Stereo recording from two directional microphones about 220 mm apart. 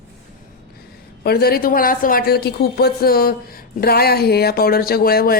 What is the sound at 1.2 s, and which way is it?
Speech, 45° left (ahead or behind).